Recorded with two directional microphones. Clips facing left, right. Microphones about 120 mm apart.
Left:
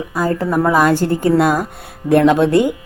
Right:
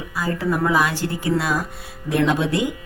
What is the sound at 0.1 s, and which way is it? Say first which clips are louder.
Speech: left 5 dB; 45° left (ahead or behind).